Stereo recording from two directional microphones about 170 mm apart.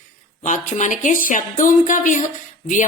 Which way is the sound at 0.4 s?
50° left (ahead or behind).